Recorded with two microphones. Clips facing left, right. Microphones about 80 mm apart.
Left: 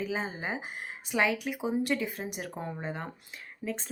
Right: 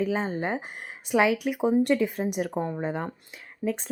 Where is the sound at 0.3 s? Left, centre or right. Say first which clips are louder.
Right 7 dB; centre.